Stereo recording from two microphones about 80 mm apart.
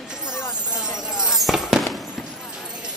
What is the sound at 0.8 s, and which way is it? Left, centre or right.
Fireworks, centre.